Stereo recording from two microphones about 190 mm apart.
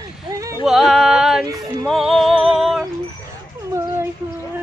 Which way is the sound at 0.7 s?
Centre (ahead or behind).